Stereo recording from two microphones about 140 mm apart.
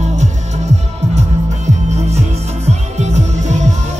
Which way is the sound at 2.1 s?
50° right (ahead or behind).